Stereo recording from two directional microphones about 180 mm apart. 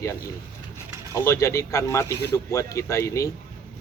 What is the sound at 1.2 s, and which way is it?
Speech, 15° left (ahead or behind).